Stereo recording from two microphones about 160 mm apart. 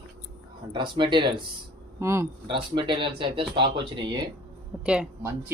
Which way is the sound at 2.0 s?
15° right (ahead or behind).